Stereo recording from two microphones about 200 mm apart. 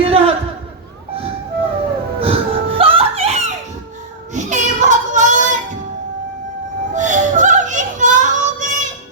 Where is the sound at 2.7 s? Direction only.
30° right (ahead or behind).